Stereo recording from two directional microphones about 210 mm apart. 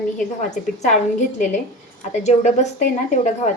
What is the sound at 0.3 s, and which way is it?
A woman's voice, 35° left (ahead or behind).